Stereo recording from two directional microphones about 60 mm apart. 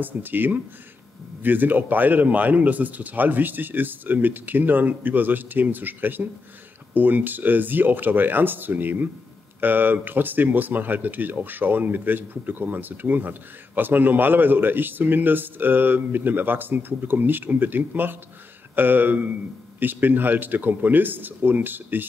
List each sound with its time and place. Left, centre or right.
0.0 s speech: right